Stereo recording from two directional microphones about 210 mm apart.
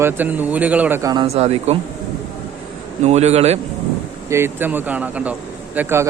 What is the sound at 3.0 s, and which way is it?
Speech, 30° right (ahead or behind).